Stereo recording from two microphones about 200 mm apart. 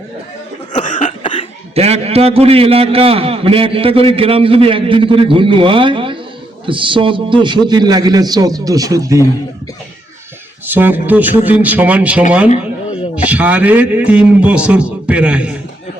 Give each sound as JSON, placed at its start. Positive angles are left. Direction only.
{"t": 0.7, "sound": "cough", "side_deg": 40}
{"t": 1.2, "sound": "cough", "side_deg": 25}
{"t": 1.7, "sound": "a man's voice", "side_deg": -30}
{"t": 10.7, "sound": "a man's voice", "side_deg": -10}
{"t": 13.2, "sound": "a man's voice", "side_deg": -5}